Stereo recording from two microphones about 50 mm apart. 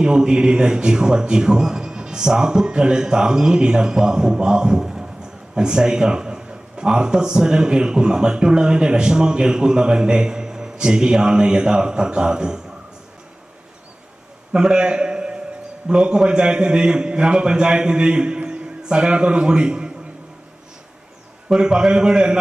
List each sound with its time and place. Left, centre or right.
0.0 s a man's voice: centre
14.5 s a man's voice: centre
21.5 s a man's voice: centre